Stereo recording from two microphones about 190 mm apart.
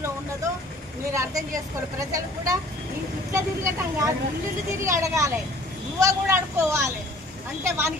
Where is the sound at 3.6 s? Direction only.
15° right (ahead or behind).